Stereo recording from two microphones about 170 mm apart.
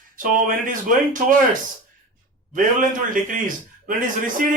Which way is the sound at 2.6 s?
50° right (ahead or behind).